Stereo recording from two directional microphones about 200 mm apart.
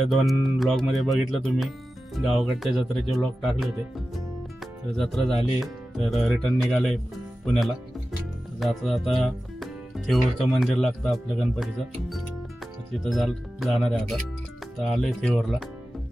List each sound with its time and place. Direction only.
0.1 s speech: centre (ahead or behind)
4.9 s speech: centre (ahead or behind)
8.5 s speech: centre (ahead or behind)